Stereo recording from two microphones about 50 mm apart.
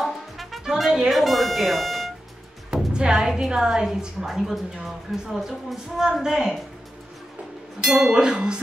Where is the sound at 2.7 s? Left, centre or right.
Centre.